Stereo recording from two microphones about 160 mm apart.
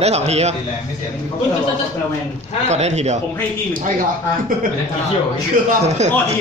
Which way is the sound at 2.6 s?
45° right (ahead or behind).